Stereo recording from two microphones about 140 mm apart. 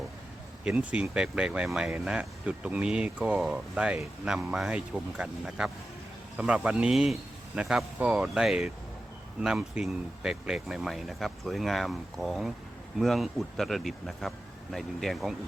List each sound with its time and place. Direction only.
0.6 s speech: 10° right (ahead or behind)